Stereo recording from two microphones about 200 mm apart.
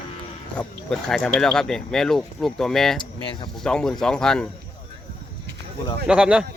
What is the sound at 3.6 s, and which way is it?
Speech, 5° left (ahead or behind).